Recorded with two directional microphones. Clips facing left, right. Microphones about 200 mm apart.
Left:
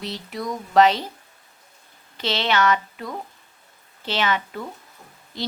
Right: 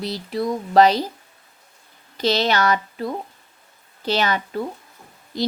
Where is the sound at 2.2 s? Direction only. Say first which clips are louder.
Right 3 dB; 40° right (ahead or behind).